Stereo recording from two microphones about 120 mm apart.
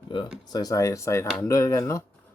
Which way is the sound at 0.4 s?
30° left (ahead or behind).